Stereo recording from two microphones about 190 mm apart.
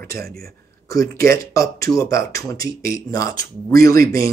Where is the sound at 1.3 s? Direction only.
15° left (ahead or behind).